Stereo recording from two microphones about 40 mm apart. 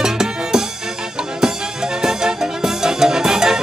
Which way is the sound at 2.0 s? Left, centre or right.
Centre.